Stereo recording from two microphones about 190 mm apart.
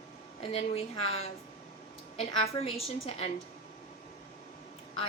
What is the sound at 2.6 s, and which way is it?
Speech, 30° left (ahead or behind).